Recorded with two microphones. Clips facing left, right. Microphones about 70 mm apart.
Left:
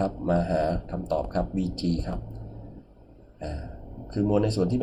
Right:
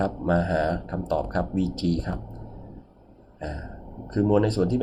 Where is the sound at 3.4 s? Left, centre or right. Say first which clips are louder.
Right 2 dB; right.